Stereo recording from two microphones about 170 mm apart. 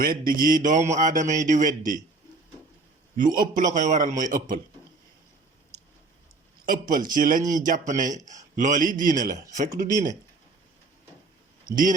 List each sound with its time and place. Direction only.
0.0 s a man's voice: 55° right (ahead or behind)
3.2 s a man's voice: 55° right (ahead or behind)
5.7 s a sound: 65° right (ahead or behind)
6.7 s a man's voice: 55° right (ahead or behind)